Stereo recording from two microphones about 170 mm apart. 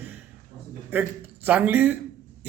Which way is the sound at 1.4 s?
10° right (ahead or behind).